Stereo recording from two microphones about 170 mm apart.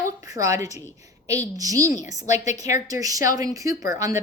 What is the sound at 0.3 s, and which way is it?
A woman's voice, 20° right (ahead or behind).